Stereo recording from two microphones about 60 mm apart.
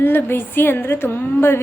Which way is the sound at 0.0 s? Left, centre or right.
Left.